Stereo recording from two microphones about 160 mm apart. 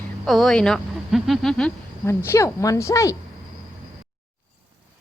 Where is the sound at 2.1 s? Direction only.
15° left (ahead or behind).